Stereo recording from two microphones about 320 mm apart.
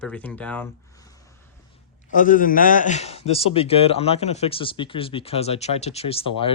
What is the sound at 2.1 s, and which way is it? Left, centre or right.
A man's voice, left.